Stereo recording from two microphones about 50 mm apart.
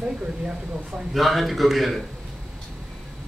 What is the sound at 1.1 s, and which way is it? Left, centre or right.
Speech, centre.